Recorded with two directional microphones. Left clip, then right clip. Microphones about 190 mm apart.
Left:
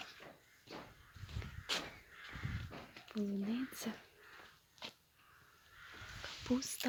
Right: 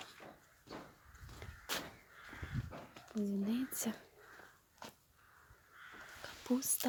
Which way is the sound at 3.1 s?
10° right (ahead or behind).